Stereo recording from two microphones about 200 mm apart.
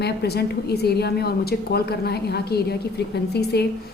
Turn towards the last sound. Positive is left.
turn(degrees=55)  # may be behind; listen again after turning